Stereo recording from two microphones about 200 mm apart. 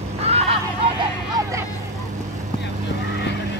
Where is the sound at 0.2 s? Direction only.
30° right (ahead or behind).